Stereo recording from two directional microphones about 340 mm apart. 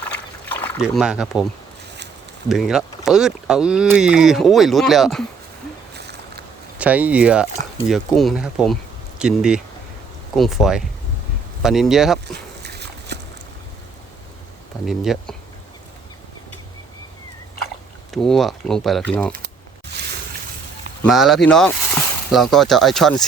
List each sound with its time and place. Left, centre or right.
0.6 s speech: centre
2.5 s speech: centre
6.0 s a sound: right
6.7 s speech: centre
12.3 s dog: right
14.8 s speech: centre
18.1 s speech: centre
21.0 s speech: centre